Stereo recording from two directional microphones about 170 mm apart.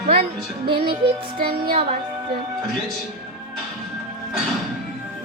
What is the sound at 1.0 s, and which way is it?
Music, 30° right (ahead or behind).